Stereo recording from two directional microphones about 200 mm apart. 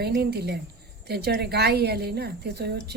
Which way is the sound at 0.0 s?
50° right (ahead or behind).